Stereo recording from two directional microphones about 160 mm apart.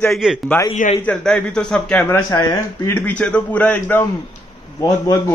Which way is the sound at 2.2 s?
20° left (ahead or behind).